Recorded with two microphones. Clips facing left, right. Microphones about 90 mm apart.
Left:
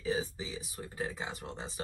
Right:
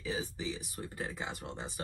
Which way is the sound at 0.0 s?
35° left (ahead or behind).